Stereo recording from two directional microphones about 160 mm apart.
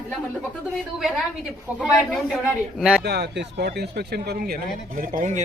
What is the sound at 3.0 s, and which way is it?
Speech, 90° right.